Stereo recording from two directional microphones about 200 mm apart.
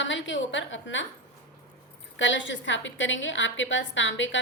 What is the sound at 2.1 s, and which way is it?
A woman's voice, 70° left (ahead or behind).